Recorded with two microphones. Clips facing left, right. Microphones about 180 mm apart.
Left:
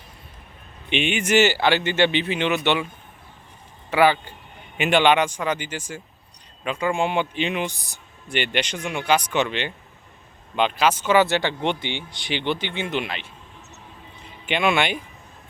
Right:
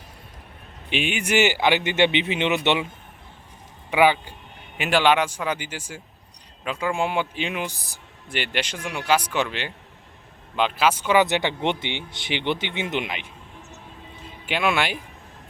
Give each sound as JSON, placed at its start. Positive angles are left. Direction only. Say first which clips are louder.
{"t": 0.9, "sound": "speech", "louder": "left 3 dB", "side_deg": -5}
{"t": 3.9, "sound": "speech", "louder": "even", "side_deg": -15}
{"t": 4.8, "sound": "a man's voice", "louder": "left 2 dB", "side_deg": 0}
{"t": 14.4, "sound": "a man's voice", "louder": "left 2 dB", "side_deg": -5}